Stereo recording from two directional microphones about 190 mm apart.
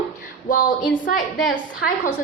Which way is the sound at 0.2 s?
50° left (ahead or behind).